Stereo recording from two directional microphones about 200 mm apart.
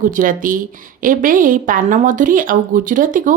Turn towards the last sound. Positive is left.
turn(degrees=-40)  # may be behind; listen again after turning